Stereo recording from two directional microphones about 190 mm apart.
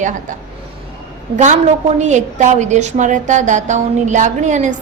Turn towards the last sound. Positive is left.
turn(degrees=-40)  # may be behind; listen again after turning